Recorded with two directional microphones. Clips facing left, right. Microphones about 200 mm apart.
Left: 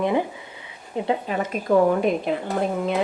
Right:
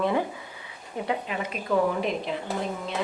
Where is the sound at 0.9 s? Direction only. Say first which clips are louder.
Left 5 dB; 30° left (ahead or behind).